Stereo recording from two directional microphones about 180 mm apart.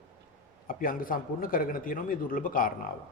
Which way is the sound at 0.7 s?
50° left (ahead or behind).